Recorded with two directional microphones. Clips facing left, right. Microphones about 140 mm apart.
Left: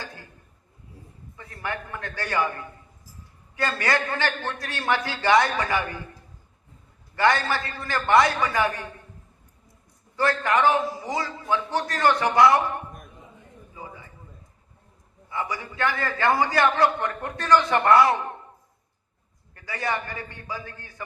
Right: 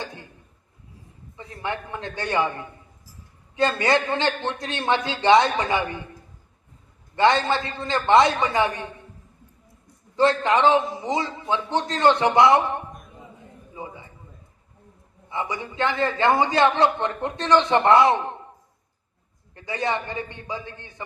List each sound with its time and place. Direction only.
0.0 s a sound: 20° right (ahead or behind)
1.4 s a man's voice: 20° right (ahead or behind)
7.2 s a man's voice: 20° right (ahead or behind)
10.2 s a man's voice: 20° right (ahead or behind)
15.3 s a man's voice: 20° right (ahead or behind)
19.5 s a man's voice: 20° right (ahead or behind)